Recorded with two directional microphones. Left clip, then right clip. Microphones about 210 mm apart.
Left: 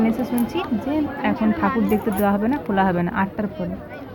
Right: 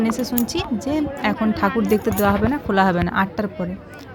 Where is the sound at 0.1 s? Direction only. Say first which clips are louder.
Even; 25° right (ahead or behind).